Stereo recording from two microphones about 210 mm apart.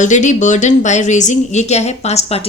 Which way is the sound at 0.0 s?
35° left (ahead or behind).